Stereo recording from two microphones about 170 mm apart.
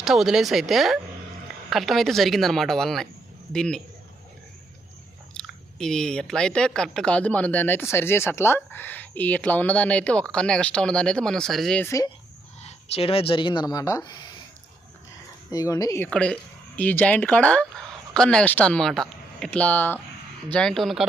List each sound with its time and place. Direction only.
0.0 s speech: centre (ahead or behind)
5.3 s speech: 5° left (ahead or behind)
12.6 s speech: 35° left (ahead or behind)
15.4 s speech: 20° left (ahead or behind)
16.0 s speech: 5° left (ahead or behind)